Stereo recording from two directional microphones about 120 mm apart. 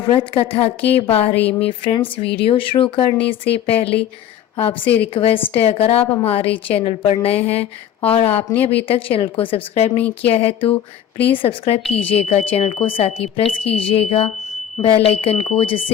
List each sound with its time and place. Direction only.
0.1 s a woman's voice: 50° left (ahead or behind)